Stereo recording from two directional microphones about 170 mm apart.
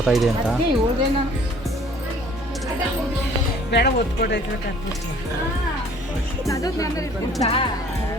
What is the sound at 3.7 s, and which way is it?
Speech, 85° left.